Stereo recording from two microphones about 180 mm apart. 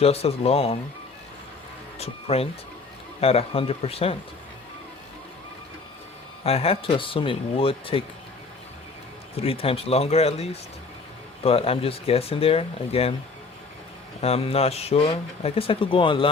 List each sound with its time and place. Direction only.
0.0 s speech: 35° left (ahead or behind)
2.0 s speech: 35° left (ahead or behind)
6.4 s speech: 35° left (ahead or behind)
9.3 s speech: 30° left (ahead or behind)
14.2 s speech: 35° left (ahead or behind)